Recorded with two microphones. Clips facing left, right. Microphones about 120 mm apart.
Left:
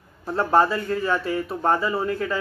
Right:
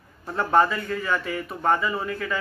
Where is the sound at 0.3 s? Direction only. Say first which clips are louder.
Left 1 dB; 30° left (ahead or behind).